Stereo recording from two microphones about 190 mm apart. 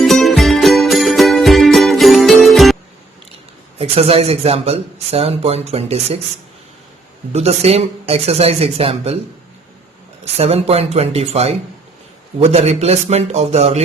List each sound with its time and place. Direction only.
0.0 s music: centre (ahead or behind)
3.8 s speech: 30° right (ahead or behind)
7.3 s speech: 35° right (ahead or behind)
10.3 s speech: 35° right (ahead or behind)